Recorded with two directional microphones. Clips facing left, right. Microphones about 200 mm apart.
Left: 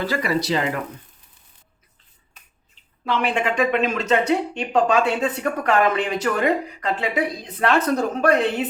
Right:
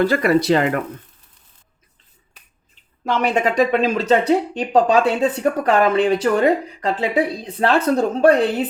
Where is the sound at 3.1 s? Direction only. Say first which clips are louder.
Right 3 dB; 40° right (ahead or behind).